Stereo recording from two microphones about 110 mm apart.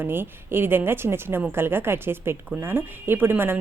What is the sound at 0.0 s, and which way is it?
A woman's voice, 20° right (ahead or behind).